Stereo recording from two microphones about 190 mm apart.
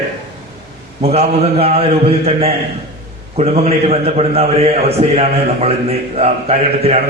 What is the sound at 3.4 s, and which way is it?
A man's voice, 35° right (ahead or behind).